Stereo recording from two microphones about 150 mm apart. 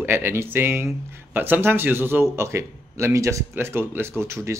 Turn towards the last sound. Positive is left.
turn(degrees=-20)  # may be behind; listen again after turning